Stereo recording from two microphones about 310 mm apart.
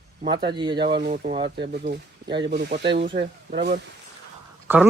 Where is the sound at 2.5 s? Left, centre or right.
Right.